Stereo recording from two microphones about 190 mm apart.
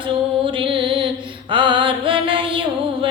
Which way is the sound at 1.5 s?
25° right (ahead or behind).